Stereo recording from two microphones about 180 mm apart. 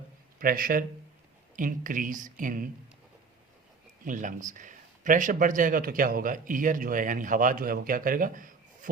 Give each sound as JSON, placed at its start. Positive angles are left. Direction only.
{"t": 0.3, "sound": "speech", "side_deg": -50}
{"t": 4.0, "sound": "speech", "side_deg": -45}